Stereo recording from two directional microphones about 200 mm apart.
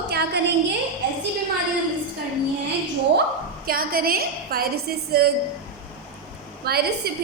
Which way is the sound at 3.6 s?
50° right (ahead or behind).